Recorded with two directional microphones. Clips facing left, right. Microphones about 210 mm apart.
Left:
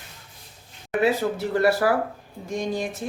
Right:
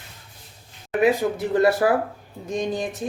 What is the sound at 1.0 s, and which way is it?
Speech, 15° right (ahead or behind).